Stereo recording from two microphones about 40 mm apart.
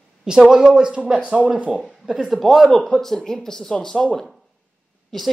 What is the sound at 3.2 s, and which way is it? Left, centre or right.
Speech, centre.